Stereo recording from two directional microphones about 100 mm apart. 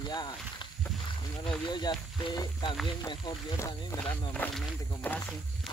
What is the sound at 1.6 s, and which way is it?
Speech, 45° left (ahead or behind).